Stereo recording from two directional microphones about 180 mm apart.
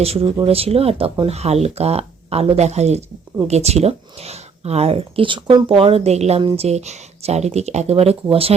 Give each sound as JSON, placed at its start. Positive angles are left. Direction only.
{"t": 0.0, "sound": "speech", "side_deg": -35}